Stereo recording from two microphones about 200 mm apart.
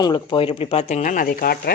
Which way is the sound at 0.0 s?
20° left (ahead or behind).